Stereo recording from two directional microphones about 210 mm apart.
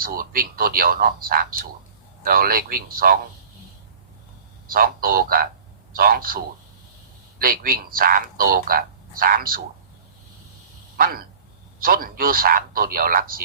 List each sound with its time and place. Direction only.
0.0 s speech: 45° right (ahead or behind)
4.7 s speech: 45° right (ahead or behind)
10.9 s speech: 45° right (ahead or behind)